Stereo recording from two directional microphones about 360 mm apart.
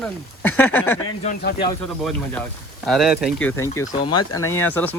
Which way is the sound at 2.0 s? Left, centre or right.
Centre.